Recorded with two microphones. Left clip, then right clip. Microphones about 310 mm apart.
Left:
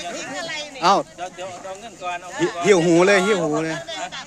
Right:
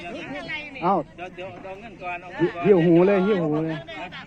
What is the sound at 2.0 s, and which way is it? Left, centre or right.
Speech, centre.